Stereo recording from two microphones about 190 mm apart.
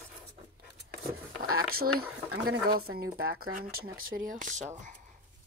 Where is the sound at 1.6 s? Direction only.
50° right (ahead or behind).